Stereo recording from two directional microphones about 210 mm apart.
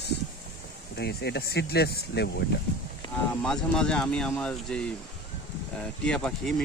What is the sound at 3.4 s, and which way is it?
Speech, 5° left (ahead or behind).